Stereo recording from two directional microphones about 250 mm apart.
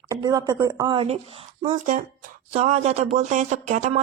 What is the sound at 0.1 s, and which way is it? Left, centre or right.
A woman's voice, centre.